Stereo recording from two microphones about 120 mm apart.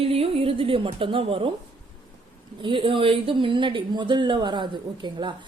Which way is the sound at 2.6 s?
45° right (ahead or behind).